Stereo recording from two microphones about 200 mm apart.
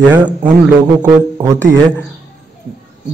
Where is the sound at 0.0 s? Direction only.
5° right (ahead or behind).